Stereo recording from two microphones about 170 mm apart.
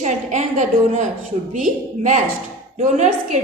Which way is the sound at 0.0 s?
45° right (ahead or behind).